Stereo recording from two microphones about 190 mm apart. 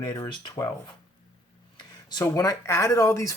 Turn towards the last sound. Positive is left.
turn(degrees=15)  # may be behind; listen again after turning